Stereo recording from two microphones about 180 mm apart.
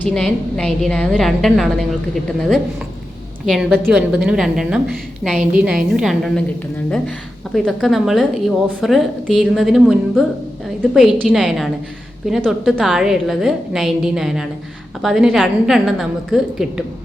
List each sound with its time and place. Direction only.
0.0 s a woman's voice: 5° left (ahead or behind)
3.4 s a woman's voice: centre (ahead or behind)
7.5 s a woman's voice: centre (ahead or behind)